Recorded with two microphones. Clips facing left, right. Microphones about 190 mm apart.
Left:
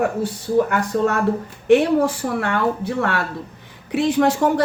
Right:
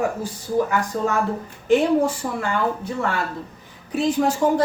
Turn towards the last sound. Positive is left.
turn(degrees=70)  # may be behind; listen again after turning